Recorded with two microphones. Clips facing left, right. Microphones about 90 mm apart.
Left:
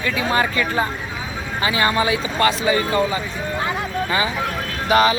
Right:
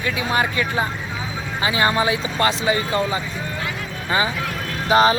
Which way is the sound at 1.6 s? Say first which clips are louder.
Even; 20° right (ahead or behind).